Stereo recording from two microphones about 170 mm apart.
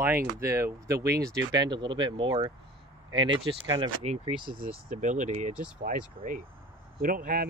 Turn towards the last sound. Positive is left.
turn(degrees=-55)  # may be behind; listen again after turning